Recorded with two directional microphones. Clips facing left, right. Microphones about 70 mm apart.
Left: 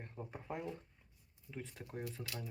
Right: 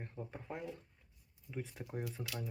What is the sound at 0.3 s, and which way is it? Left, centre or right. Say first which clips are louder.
Speech: left 4 dB; centre.